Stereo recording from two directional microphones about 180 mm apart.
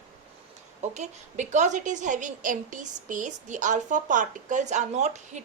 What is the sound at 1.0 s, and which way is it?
A woman's voice, 40° right (ahead or behind).